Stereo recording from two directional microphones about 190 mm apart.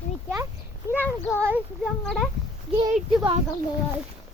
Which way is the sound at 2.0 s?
Centre (ahead or behind).